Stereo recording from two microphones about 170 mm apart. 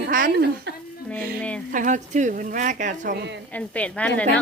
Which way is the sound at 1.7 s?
50° right (ahead or behind).